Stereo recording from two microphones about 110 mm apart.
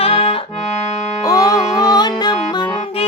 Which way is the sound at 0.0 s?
60° left (ahead or behind).